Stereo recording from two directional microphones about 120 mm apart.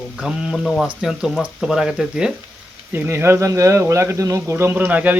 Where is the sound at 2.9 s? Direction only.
15° right (ahead or behind).